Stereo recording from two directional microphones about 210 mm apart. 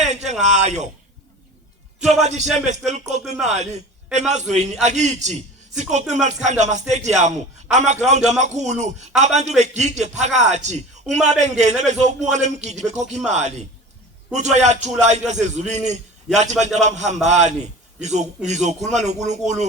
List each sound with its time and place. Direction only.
0.0 s a sound: 35° right (ahead or behind)
0.4 s speech: 35° right (ahead or behind)
2.2 s a man's voice: 35° right (ahead or behind)